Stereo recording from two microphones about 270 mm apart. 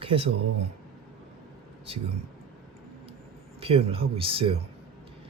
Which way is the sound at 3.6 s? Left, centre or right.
Right.